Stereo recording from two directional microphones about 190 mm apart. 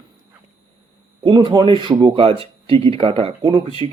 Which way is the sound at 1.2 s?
25° right (ahead or behind).